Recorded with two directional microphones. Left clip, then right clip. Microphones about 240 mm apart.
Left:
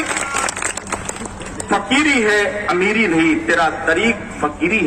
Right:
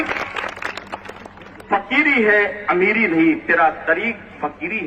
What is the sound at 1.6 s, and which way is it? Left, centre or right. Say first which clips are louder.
A man's voice: left 1 dB; left.